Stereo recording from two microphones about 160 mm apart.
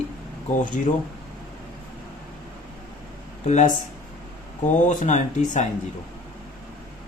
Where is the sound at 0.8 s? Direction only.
50° left (ahead or behind).